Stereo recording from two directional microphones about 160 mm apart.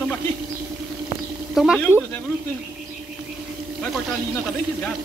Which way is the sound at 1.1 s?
90° right.